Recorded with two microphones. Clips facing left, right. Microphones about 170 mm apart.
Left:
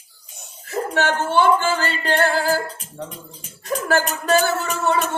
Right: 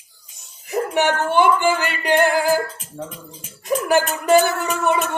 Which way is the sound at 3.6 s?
15° right (ahead or behind).